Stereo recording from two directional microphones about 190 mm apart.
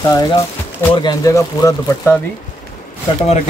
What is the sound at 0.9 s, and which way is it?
Speech, 20° left (ahead or behind).